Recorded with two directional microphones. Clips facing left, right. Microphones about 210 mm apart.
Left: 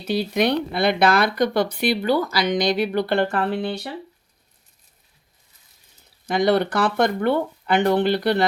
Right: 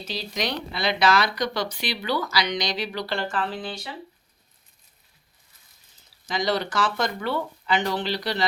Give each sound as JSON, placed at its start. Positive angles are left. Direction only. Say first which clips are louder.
{"t": 0.0, "sound": "speech", "louder": "left 9 dB", "side_deg": 60}
{"t": 6.2, "sound": "speech", "louder": "left 7 dB", "side_deg": 60}